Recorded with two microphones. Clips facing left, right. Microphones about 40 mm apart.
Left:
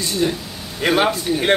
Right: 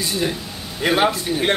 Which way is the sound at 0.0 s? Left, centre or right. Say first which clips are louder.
Left 2 dB; centre.